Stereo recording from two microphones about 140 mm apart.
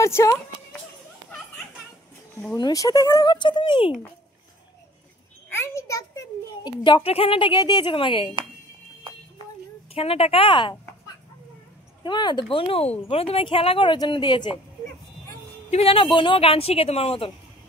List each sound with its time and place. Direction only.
0.0 s speech: 20° left (ahead or behind)
2.5 s a child's voice: 25° left (ahead or behind)
5.5 s a child's voice: 20° left (ahead or behind); by 8.3 s 40° left (ahead or behind)
9.9 s a child's voice: 45° left (ahead or behind)
12.0 s a child's voice: 35° left (ahead or behind)
15.7 s speech: 40° left (ahead or behind)